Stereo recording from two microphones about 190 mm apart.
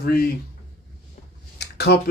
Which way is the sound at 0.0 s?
55° left (ahead or behind).